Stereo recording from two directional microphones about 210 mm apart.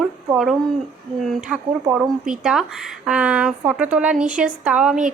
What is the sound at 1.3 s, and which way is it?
A woman's voice, 5° right (ahead or behind).